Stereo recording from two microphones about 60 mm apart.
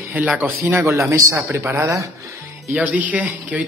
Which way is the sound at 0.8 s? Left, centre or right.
Right.